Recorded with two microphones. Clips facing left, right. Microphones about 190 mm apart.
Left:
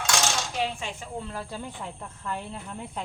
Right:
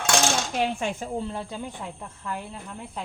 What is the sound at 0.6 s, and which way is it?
Speech, 50° right (ahead or behind).